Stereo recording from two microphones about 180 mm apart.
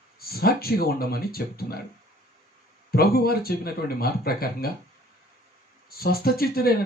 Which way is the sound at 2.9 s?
60° left (ahead or behind).